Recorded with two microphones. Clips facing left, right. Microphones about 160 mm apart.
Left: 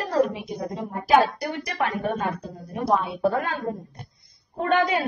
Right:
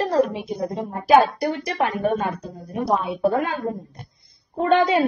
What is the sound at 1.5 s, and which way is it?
A woman's voice, 25° right (ahead or behind).